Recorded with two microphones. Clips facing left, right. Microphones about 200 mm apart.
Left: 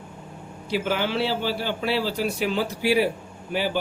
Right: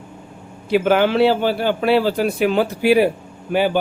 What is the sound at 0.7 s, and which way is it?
Speech, 55° right (ahead or behind).